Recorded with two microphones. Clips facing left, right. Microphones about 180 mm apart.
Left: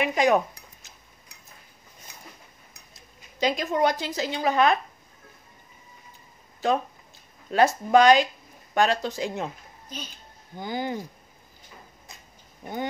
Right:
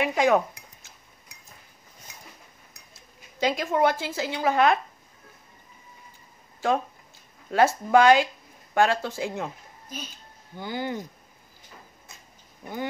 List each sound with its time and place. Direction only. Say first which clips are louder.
0.0 s a woman's voice: even; 15° left (ahead or behind)
3.3 s a woman's voice: even; 15° left (ahead or behind)
7.5 s a woman's voice: even; 15° left (ahead or behind)
10.6 s a woman's voice: left 1 dB; 15° left (ahead or behind)